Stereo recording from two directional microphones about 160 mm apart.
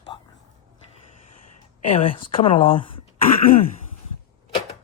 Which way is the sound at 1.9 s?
35° left (ahead or behind).